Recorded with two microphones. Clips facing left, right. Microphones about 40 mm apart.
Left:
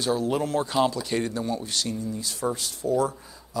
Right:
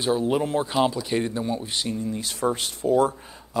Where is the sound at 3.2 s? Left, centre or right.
Right.